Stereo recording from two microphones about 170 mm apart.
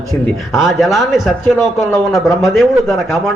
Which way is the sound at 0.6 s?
Centre (ahead or behind).